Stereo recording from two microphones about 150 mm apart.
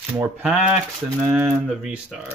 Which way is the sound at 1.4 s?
5° right (ahead or behind).